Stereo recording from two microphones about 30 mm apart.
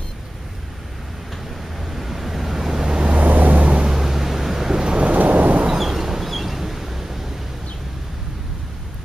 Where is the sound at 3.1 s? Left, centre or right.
Right.